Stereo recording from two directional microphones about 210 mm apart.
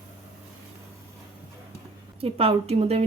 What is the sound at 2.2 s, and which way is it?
Speech, 30° right (ahead or behind).